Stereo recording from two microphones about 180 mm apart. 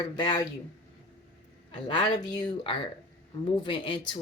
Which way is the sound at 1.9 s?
25° left (ahead or behind).